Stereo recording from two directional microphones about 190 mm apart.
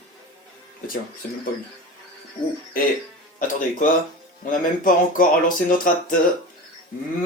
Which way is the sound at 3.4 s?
45° left (ahead or behind).